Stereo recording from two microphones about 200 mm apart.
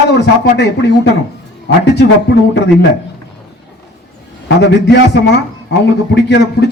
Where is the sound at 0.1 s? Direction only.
55° left (ahead or behind).